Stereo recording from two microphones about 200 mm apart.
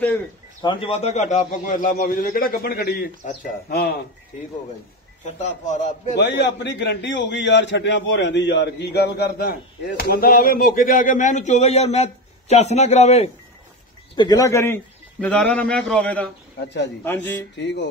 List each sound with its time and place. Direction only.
0.6 s a man's voice: 25° left (ahead or behind); by 3.9 s 45° left (ahead or behind)
5.2 s a man's voice: 35° left (ahead or behind)
6.2 s a man's voice: 60° left (ahead or behind); by 13.3 s 35° left (ahead or behind)
14.1 s a man's voice: 20° left (ahead or behind)